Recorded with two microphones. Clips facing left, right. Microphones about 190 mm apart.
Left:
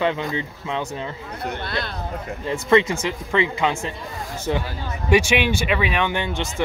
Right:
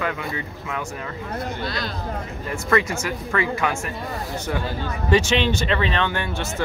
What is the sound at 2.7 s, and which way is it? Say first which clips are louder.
Speech: left 4 dB; 20° left (ahead or behind).